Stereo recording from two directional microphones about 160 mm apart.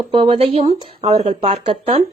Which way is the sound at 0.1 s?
35° right (ahead or behind).